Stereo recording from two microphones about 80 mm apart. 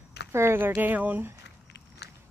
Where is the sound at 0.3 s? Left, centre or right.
Right.